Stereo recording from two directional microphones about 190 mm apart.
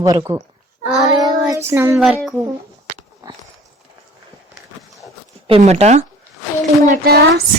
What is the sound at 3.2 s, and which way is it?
Clip-clop, 15° right (ahead or behind).